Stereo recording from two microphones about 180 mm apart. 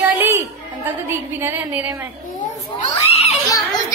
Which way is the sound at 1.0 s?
10° right (ahead or behind).